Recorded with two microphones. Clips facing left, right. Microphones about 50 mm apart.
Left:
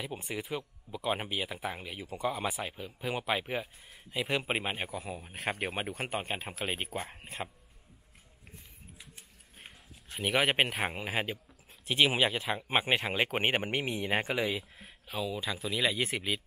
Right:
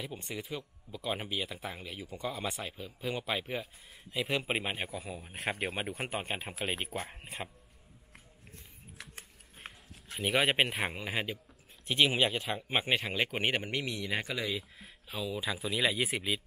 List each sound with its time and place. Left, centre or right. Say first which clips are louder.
0.2 s speech: left 3 dB; centre
9.6 s a sound: right 5 dB; right
10.1 s speech: even; centre; by 14.4 s left
14.4 s speech: left 3 dB; centre